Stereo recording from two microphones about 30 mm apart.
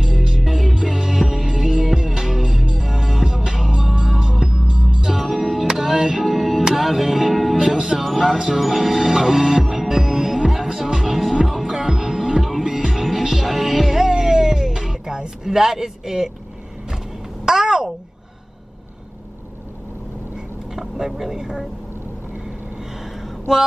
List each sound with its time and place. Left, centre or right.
0.0 s music: centre
6.2 s music: centre
7.7 s music: centre
8.0 s music: centre
17.5 s babbling: centre
20.7 s a sound: centre